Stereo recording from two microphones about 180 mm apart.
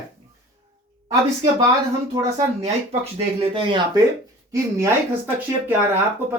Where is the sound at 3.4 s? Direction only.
30° right (ahead or behind).